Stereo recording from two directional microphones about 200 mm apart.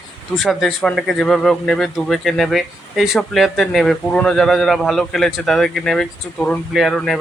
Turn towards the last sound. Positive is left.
turn(degrees=0)  # may be behind; listen again after turning